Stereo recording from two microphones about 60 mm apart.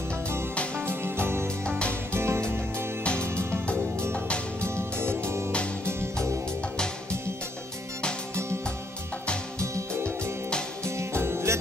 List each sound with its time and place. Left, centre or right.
0.7 s music: right
1.7 s music: centre
2.1 s music: right
3.0 s music: centre
4.6 s music: right
11.0 s music: right